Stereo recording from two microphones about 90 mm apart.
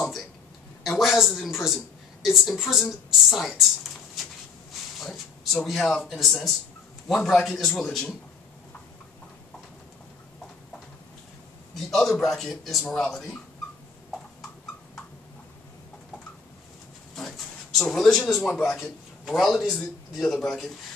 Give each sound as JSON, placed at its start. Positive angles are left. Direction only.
{"t": 0.0, "sound": "a sound", "side_deg": 0}
{"t": 0.8, "sound": "a woman's voice", "side_deg": 0}
{"t": 5.0, "sound": "a man's voice", "side_deg": 0}
{"t": 11.7, "sound": "a man's voice", "side_deg": 0}
{"t": 17.1, "sound": "a sound", "side_deg": 5}
{"t": 19.2, "sound": "a man's voice", "side_deg": 0}